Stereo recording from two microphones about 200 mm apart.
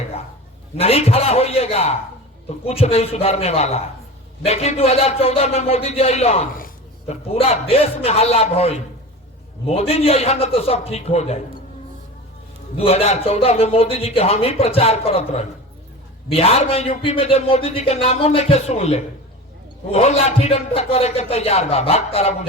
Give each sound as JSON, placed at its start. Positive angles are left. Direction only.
{"t": 0.8, "sound": "a man's voice", "side_deg": 30}
{"t": 12.7, "sound": "a man's voice", "side_deg": 30}